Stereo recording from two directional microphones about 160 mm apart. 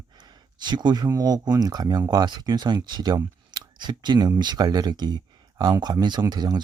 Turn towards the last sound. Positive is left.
turn(degrees=-25)  # may be behind; listen again after turning